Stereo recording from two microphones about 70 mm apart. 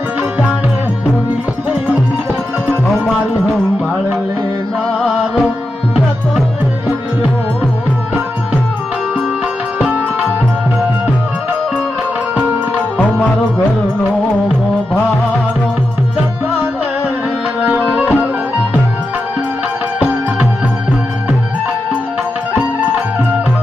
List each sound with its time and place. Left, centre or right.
4.9 s music: centre
13.0 s music: centre
17.6 s tabla: right